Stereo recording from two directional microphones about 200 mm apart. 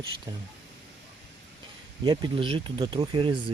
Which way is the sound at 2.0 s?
25° right (ahead or behind).